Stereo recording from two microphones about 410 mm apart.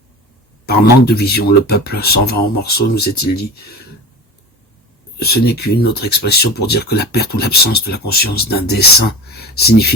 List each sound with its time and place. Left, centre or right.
0.6 s speech: left
5.2 s speech: left